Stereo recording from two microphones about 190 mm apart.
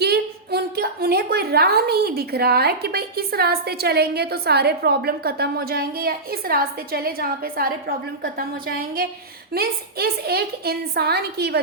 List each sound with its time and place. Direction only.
0.0 s a woman's voice: 55° right (ahead or behind)